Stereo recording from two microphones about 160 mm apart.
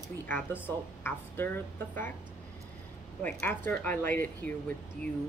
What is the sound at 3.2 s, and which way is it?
A woman's voice, 10° left (ahead or behind).